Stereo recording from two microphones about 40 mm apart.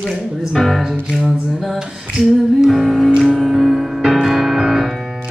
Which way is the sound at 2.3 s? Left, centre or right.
Centre.